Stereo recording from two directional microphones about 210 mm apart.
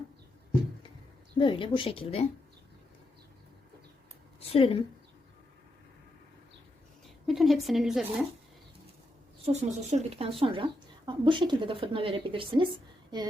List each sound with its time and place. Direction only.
1.4 s speech: 25° left (ahead or behind)
4.4 s a woman's voice: 25° left (ahead or behind)
7.3 s speech: centre (ahead or behind)
9.4 s speech: 30° right (ahead or behind)